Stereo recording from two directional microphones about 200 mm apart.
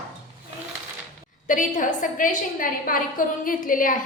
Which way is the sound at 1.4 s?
40° left (ahead or behind).